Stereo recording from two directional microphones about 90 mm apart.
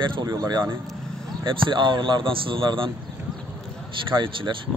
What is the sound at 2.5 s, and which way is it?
Speech, 70° right (ahead or behind).